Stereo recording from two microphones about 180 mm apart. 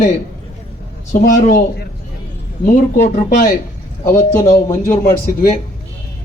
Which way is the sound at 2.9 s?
45° left (ahead or behind).